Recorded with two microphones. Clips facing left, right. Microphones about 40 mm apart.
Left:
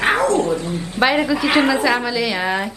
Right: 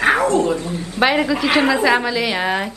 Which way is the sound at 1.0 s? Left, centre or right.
Centre.